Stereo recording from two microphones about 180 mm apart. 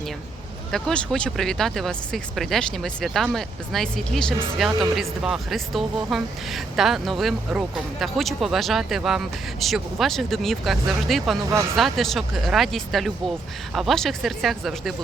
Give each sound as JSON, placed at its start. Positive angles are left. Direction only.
{"t": 0.7, "sound": "speech", "side_deg": 5}